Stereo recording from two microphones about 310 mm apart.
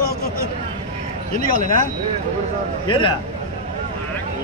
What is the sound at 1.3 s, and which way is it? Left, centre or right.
Speech, left.